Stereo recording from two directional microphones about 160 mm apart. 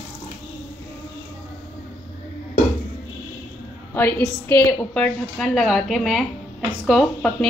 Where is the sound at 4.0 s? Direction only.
15° left (ahead or behind).